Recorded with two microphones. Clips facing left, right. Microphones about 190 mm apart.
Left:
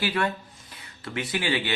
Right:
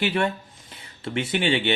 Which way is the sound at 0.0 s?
25° right (ahead or behind).